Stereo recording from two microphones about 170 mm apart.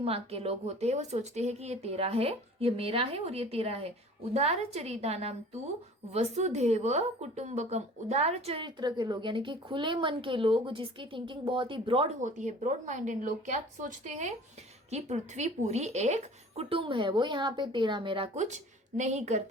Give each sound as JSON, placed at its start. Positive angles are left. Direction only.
{"t": 0.0, "sound": "a woman's voice", "side_deg": -35}
{"t": 12.2, "sound": "a woman's voice", "side_deg": -45}
{"t": 18.3, "sound": "speech", "side_deg": -45}